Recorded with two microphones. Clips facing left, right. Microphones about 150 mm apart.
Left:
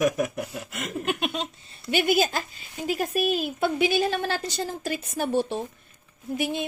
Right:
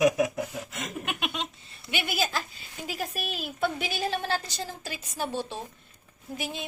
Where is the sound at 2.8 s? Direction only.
50° left (ahead or behind).